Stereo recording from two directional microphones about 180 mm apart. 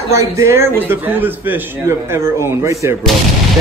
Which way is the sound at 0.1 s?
15° right (ahead or behind).